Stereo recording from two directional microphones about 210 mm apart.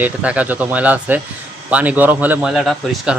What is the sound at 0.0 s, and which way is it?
Speech, 5° right (ahead or behind).